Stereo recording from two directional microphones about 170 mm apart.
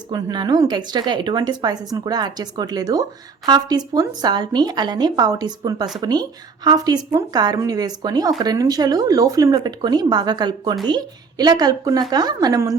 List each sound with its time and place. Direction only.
0.1 s speech: 25° right (ahead or behind)